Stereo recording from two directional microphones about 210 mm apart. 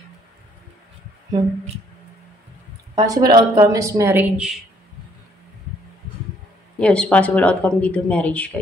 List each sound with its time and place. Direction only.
3.0 s speech: 20° right (ahead or behind)
6.8 s speech: 5° left (ahead or behind)